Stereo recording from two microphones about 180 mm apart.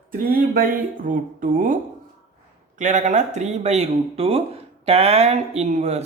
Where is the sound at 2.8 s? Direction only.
40° right (ahead or behind).